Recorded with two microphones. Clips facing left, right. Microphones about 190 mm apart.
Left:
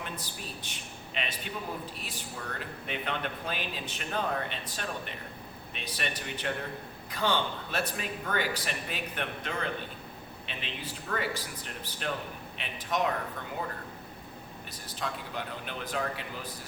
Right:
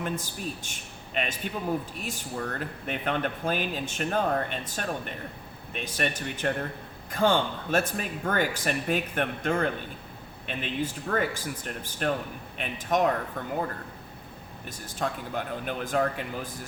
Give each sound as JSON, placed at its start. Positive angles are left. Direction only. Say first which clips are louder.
{"t": 0.0, "sound": "a man's voice", "louder": "right 8 dB", "side_deg": -45}
{"t": 14.8, "sound": "speech", "louder": "right 6 dB", "side_deg": -50}